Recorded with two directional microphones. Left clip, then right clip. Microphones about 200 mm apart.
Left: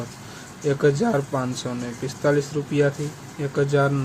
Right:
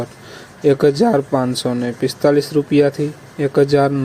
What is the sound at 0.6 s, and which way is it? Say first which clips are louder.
Speech: right 7 dB; 30° right (ahead or behind).